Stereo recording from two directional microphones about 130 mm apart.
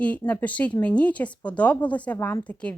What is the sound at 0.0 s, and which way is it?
Speech, 10° left (ahead or behind).